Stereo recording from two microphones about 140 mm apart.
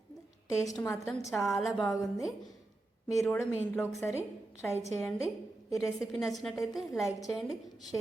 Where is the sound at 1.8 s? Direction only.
25° left (ahead or behind).